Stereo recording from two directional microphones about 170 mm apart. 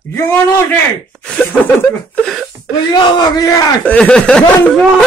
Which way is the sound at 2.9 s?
25° left (ahead or behind).